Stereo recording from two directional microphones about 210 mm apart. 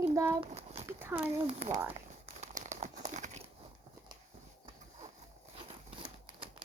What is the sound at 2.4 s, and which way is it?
Crumpling, 35° right (ahead or behind).